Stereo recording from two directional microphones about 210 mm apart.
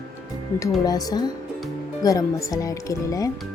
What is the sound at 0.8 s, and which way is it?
Speech, 20° left (ahead or behind).